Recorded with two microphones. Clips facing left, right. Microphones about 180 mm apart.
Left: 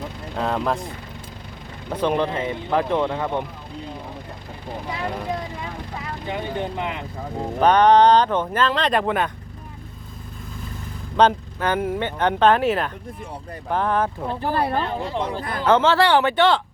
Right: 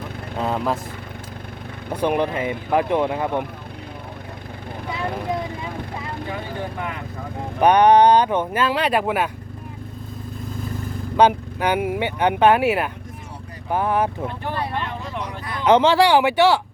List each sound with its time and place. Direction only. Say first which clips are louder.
0.3 s speech: even; 5° right (ahead or behind)
1.9 s speech: right 1 dB; 10° right (ahead or behind)
6.2 s speech: left 6 dB; 20° left (ahead or behind)
7.6 s speech: right 1 dB; 15° right (ahead or behind)
11.2 s speech: right 1 dB; 10° right (ahead or behind)
14.3 s speech: left 4 dB; 35° left (ahead or behind)
15.6 s speech: right 2 dB; 15° right (ahead or behind)